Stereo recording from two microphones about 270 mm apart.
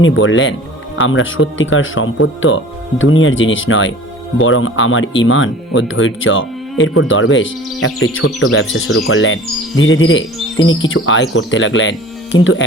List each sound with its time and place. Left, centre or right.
0.0 s speech: left